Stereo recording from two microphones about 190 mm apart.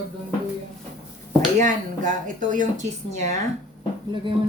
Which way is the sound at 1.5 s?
40° right (ahead or behind).